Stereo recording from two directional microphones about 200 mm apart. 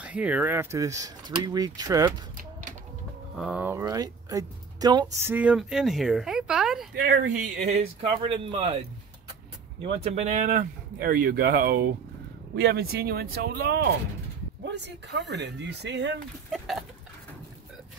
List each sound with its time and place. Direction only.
0.0 s speech: 5° right (ahead or behind)
3.3 s speech: 5° right (ahead or behind)
7.0 s speech: 45° right (ahead or behind)
7.5 s speech: 35° right (ahead or behind)
9.8 s speech: 30° right (ahead or behind); by 16.2 s 60° right (ahead or behind)
16.5 s a sound: centre (ahead or behind)